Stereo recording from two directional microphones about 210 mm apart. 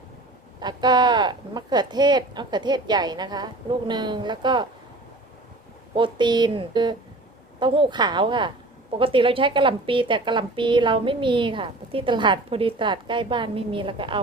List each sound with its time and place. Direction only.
0.6 s a woman's voice: 20° right (ahead or behind)
5.9 s a woman's voice: 20° right (ahead or behind)